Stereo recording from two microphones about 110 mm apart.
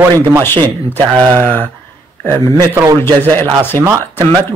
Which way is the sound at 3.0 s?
20° left (ahead or behind).